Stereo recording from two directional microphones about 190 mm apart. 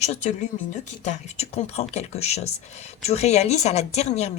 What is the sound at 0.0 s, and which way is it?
Speech, 35° left (ahead or behind).